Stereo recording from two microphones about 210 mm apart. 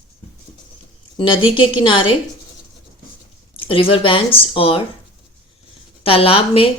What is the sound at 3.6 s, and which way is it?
Speech, 25° left (ahead or behind).